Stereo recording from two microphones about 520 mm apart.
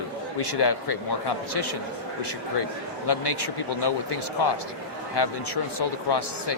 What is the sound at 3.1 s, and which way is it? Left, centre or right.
Speech, left.